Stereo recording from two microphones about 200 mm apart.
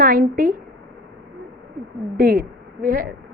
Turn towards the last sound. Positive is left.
turn(degrees=-45)  # may be behind; listen again after turning